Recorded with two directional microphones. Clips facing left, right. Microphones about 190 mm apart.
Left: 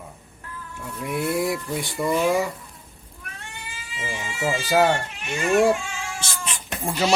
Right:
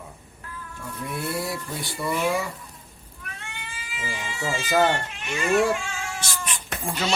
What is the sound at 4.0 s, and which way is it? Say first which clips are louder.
Speech: left 4 dB; 15° left (ahead or behind).